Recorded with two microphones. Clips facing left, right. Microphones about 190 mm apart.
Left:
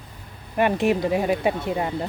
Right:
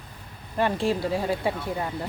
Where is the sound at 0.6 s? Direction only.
20° left (ahead or behind).